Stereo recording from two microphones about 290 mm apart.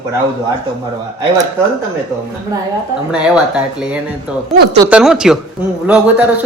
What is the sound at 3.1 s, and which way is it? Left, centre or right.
Speech, centre.